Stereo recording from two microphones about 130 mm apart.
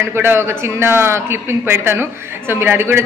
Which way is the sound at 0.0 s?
15° right (ahead or behind).